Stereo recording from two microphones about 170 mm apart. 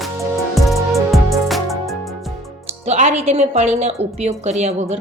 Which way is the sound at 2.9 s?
40° right (ahead or behind).